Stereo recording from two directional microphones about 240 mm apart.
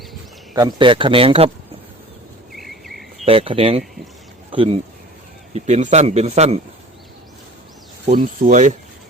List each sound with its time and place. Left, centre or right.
0.5 s a man's voice: centre
2.5 s cricket: centre
3.2 s a man's voice: right
8.1 s speech: right